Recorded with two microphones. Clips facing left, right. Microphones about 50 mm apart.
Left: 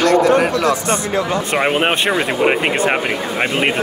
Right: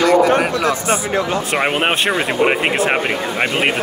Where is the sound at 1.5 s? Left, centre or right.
Centre.